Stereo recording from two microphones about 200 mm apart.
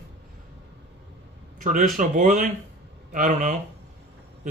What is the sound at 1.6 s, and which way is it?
Speech, 40° right (ahead or behind).